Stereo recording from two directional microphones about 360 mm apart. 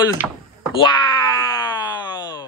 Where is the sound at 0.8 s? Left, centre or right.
Centre.